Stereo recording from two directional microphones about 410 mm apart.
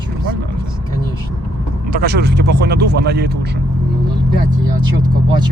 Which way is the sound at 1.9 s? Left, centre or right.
Right.